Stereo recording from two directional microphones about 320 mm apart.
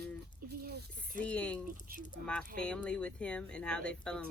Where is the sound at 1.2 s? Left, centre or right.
Centre.